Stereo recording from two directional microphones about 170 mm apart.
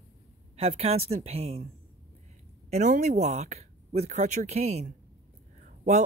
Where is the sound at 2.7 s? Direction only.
45° right (ahead or behind).